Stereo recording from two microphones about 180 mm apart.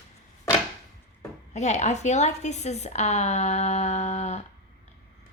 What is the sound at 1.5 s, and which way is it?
A woman's voice, 40° left (ahead or behind).